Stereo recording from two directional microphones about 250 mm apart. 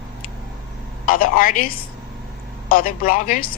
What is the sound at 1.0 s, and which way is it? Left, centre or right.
A woman's voice, left.